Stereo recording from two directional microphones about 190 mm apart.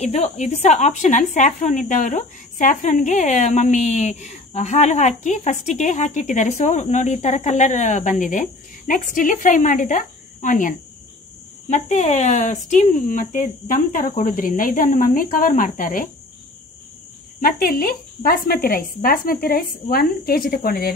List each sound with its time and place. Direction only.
0.0 s a woman's voice: 35° left (ahead or behind)
11.7 s speech: 40° left (ahead or behind)
17.4 s speech: 45° left (ahead or behind)